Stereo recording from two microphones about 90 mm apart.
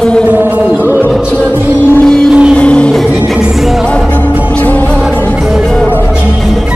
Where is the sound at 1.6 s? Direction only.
20° right (ahead or behind).